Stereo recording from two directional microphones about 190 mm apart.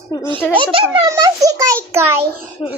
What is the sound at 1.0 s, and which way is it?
A child's voice, 20° right (ahead or behind).